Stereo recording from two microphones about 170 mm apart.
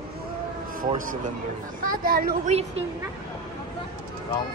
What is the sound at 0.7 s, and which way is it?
Speech, 55° right (ahead or behind).